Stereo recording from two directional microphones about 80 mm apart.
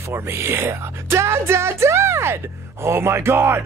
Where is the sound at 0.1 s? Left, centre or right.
Right.